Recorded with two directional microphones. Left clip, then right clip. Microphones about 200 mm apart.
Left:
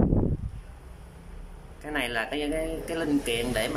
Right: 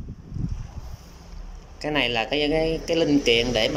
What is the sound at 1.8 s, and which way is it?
Speech, 15° right (ahead or behind).